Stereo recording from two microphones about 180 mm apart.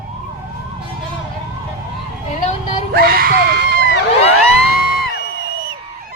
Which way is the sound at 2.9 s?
55° right (ahead or behind).